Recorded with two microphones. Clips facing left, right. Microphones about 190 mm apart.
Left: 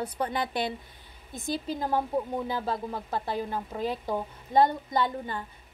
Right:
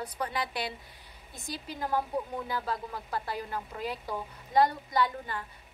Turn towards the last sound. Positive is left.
turn(degrees=25)  # may be behind; listen again after turning